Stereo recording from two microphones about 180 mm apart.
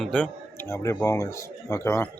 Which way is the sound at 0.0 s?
5° left (ahead or behind).